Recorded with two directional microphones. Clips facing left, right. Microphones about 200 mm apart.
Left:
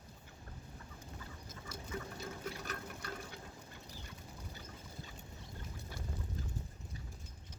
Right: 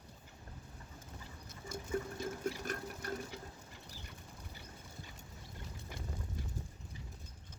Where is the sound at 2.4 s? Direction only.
45° right (ahead or behind).